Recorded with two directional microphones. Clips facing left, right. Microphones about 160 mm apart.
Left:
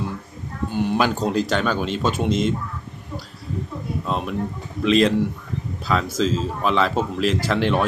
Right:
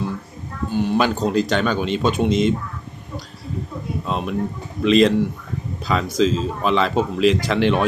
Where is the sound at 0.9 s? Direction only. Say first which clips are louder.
Right 2 dB; 10° left (ahead or behind).